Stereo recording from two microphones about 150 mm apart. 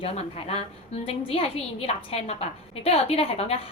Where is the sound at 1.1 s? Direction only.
40° left (ahead or behind).